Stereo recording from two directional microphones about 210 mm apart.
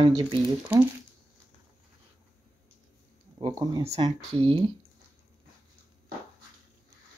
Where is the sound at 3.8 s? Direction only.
30° right (ahead or behind).